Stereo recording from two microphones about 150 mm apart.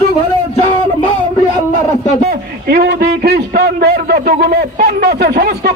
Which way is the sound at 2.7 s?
90° right.